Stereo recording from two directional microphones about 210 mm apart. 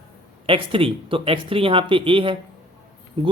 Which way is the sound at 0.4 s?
25° right (ahead or behind).